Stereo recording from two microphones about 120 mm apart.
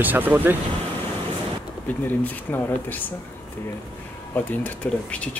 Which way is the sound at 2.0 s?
15° left (ahead or behind).